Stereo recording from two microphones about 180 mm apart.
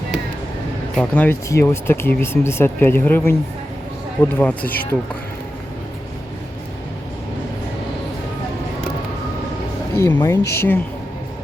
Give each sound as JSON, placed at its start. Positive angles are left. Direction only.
{"t": 0.9, "sound": "speech", "side_deg": 10}
{"t": 9.9, "sound": "speech", "side_deg": 15}